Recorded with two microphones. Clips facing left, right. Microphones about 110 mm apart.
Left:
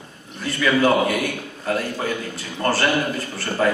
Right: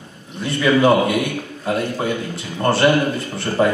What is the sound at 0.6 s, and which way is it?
Speech, 20° right (ahead or behind).